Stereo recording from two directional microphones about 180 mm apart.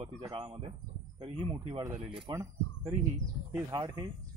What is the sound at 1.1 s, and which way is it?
Speech, 30° right (ahead or behind).